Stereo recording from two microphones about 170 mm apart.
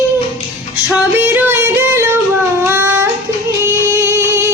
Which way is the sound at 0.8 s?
10° right (ahead or behind).